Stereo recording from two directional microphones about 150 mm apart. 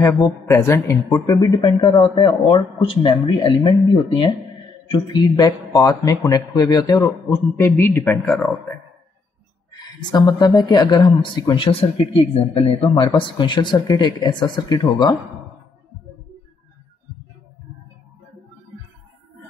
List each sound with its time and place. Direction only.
0.0 s a man's voice: 20° left (ahead or behind)
8.0 s speech: centre (ahead or behind)
9.7 s a man's voice: 30° left (ahead or behind)